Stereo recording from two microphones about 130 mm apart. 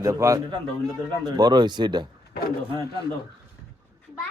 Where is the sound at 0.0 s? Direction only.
25° right (ahead or behind).